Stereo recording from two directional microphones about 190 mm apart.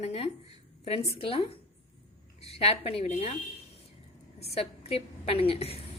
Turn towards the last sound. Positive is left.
turn(degrees=30)  # may be behind; listen again after turning